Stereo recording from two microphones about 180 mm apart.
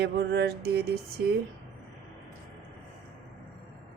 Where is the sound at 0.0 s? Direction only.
70° right (ahead or behind).